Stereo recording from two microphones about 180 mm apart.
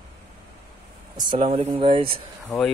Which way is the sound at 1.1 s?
30° right (ahead or behind).